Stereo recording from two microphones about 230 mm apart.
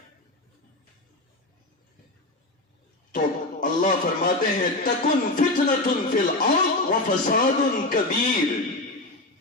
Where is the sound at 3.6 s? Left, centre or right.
Left.